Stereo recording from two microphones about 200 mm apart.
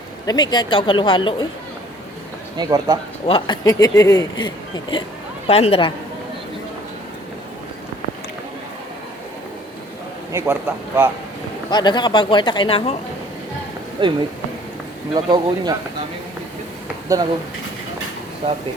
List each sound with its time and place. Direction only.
0.3 s speech: 20° left (ahead or behind)
2.6 s speech: 20° right (ahead or behind)
3.2 s speech: 25° left (ahead or behind)
10.3 s a man's voice: 10° right (ahead or behind)
11.7 s speech: 20° left (ahead or behind)
14.0 s speech: 25° right (ahead or behind)